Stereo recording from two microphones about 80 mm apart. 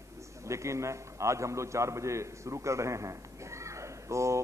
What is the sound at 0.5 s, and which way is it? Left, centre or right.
A man's voice, right.